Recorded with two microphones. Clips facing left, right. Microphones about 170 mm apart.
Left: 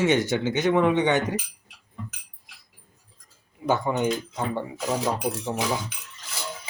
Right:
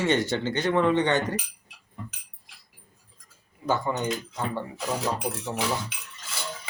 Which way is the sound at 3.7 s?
20° left (ahead or behind).